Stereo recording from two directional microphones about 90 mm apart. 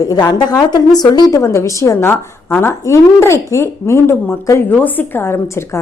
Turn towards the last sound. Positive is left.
turn(degrees=30)  # may be behind; listen again after turning